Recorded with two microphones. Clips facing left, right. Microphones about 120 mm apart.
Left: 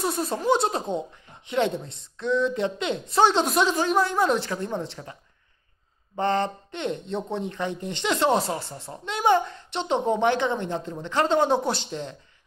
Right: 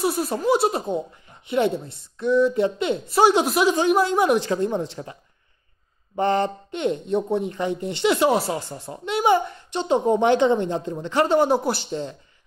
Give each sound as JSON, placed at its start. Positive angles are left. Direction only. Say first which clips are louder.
{"t": 0.0, "sound": "speech", "louder": "right 3 dB", "side_deg": -5}
{"t": 6.1, "sound": "speech", "louder": "right 3 dB", "side_deg": -15}